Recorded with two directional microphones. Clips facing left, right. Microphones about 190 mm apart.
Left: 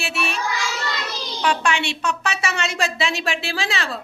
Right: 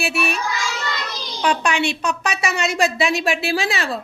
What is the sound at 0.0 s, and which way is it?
Speech, 15° right (ahead or behind).